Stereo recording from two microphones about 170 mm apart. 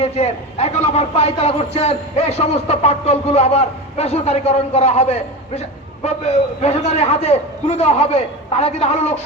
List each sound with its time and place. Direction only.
0.0 s speech: 35° left (ahead or behind)